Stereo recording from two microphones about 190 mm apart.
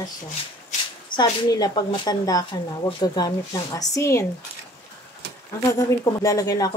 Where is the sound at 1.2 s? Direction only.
20° left (ahead or behind).